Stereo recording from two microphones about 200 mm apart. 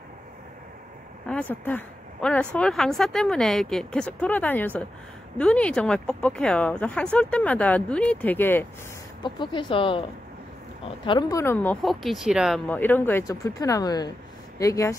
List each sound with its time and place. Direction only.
1.2 s speech: 5° left (ahead or behind)
9.2 s speech: 25° left (ahead or behind)
11.1 s speech: 20° left (ahead or behind)